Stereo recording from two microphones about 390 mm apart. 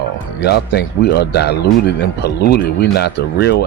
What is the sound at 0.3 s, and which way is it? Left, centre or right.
Speech, left.